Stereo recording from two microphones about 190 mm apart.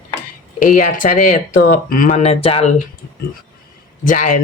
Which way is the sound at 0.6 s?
45° left (ahead or behind).